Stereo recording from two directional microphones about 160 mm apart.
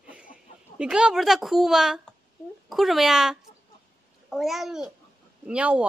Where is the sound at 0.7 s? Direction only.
5° right (ahead or behind).